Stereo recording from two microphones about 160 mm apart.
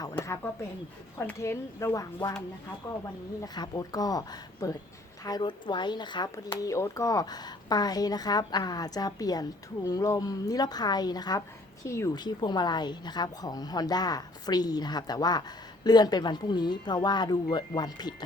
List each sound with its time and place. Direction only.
0.2 s a woman's voice: 10° left (ahead or behind)
3.4 s a woman's voice: 25° left (ahead or behind)